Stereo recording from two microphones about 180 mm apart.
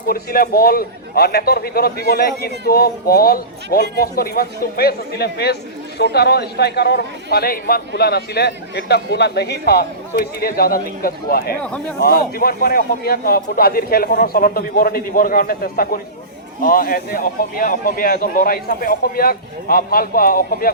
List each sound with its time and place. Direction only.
0.1 s a man's voice: 55° left (ahead or behind)
11.6 s speech: 5° left (ahead or behind)
11.9 s a man's voice: 55° left (ahead or behind)